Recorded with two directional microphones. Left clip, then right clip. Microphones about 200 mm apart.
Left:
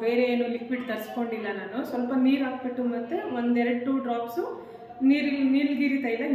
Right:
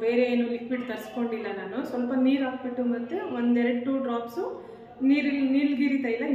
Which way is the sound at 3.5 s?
5° right (ahead or behind).